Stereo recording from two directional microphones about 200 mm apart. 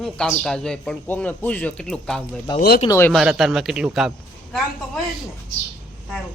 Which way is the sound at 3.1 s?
Centre (ahead or behind).